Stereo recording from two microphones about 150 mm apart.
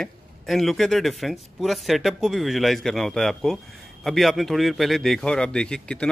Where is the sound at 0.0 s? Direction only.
Centre (ahead or behind).